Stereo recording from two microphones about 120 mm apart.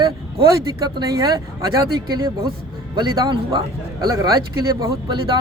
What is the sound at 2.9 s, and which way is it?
Speech, 40° right (ahead or behind).